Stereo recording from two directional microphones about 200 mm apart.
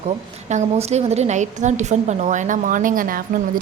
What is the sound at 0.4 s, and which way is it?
A woman's voice, 35° right (ahead or behind).